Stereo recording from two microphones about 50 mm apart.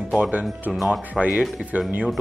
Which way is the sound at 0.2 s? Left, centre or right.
Right.